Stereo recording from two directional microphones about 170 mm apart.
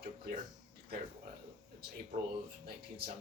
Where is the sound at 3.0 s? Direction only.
65° right (ahead or behind).